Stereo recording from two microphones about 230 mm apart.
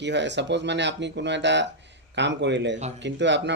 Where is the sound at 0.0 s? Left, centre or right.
Right.